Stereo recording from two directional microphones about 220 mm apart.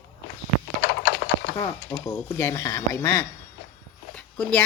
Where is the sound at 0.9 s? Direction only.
50° left (ahead or behind).